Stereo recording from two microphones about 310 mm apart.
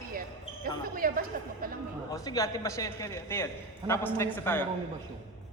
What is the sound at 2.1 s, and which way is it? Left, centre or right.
Speech, centre.